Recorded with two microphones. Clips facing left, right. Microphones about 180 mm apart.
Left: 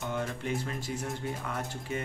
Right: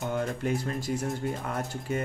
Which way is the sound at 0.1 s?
40° right (ahead or behind).